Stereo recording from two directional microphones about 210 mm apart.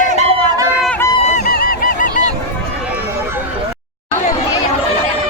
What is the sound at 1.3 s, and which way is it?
Goose, 45° left (ahead or behind).